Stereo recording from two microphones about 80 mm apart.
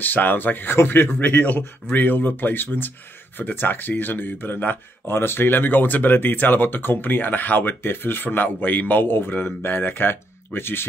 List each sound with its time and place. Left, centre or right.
0.0 s speech: left